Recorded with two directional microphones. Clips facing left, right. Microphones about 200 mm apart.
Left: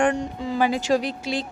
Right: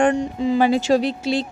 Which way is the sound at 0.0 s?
20° right (ahead or behind).